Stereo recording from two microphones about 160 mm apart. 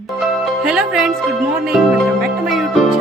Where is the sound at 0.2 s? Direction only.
Centre (ahead or behind).